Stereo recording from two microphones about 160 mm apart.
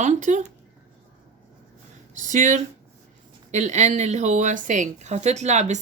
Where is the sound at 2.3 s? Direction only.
50° right (ahead or behind).